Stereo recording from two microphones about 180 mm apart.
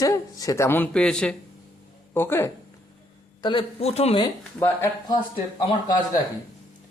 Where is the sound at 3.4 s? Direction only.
30° left (ahead or behind).